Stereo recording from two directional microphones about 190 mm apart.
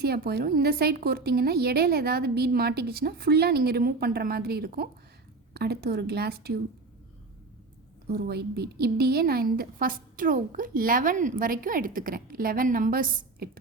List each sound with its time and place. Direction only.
0.0 s a woman's voice: 55° right (ahead or behind)
8.1 s a woman's voice: 55° right (ahead or behind)